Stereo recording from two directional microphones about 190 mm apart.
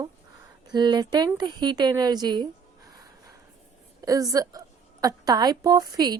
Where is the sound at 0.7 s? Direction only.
20° right (ahead or behind).